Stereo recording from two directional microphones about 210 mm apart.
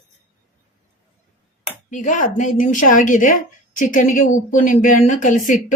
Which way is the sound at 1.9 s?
35° left (ahead or behind).